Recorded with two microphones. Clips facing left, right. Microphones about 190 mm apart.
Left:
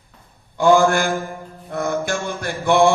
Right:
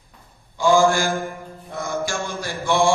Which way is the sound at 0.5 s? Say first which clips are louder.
Left 2 dB; 60° left (ahead or behind).